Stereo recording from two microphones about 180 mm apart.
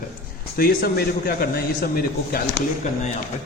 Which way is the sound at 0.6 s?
55° left (ahead or behind).